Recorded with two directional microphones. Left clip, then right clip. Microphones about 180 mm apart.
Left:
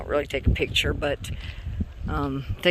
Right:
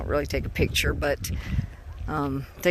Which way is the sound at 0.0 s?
Centre (ahead or behind).